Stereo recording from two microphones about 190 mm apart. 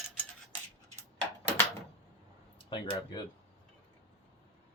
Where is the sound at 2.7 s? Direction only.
20° left (ahead or behind).